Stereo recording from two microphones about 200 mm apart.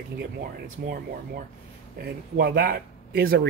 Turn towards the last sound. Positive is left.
turn(degrees=-50)  # may be behind; listen again after turning